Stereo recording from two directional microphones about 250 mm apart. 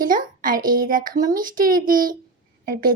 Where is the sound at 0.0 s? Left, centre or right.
Right.